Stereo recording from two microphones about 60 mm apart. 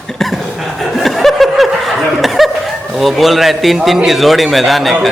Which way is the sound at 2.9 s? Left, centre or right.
Centre.